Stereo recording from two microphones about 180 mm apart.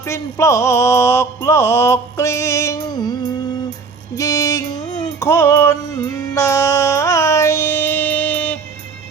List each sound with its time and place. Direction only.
0.0 s mantra: 15° left (ahead or behind)
4.2 s music: 20° left (ahead or behind)